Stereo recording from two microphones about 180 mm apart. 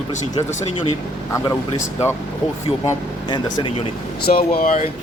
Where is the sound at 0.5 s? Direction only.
35° left (ahead or behind).